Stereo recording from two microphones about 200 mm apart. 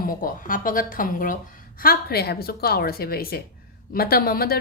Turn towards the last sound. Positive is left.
turn(degrees=50)  # may be behind; listen again after turning